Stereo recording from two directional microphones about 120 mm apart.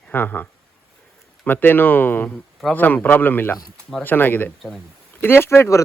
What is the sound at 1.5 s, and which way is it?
Speech, 15° left (ahead or behind).